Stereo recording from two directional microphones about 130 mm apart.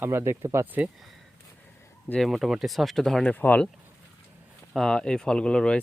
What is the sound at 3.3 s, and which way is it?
Speech, 15° left (ahead or behind).